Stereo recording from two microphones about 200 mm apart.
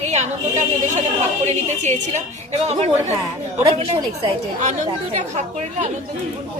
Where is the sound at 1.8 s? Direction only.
35° right (ahead or behind).